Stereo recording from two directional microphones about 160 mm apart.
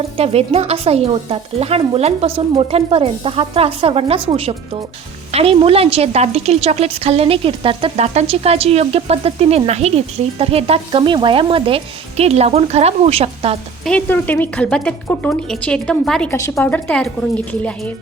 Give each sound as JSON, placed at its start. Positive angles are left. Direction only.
{"t": 0.2, "sound": "a woman's voice", "side_deg": -40}
{"t": 13.8, "sound": "a woman's voice", "side_deg": 10}
{"t": 16.3, "sound": "a woman's voice", "side_deg": 15}